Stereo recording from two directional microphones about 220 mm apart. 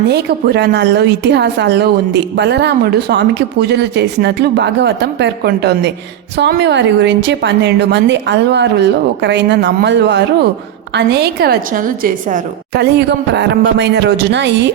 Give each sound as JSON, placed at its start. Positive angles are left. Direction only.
{"t": 0.1, "sound": "a woman's voice", "side_deg": -50}